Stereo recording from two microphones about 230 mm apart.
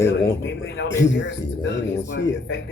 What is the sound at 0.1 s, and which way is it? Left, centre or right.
A man's voice, left.